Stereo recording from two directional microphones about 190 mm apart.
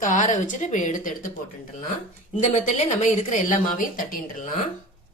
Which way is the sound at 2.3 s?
35° left (ahead or behind).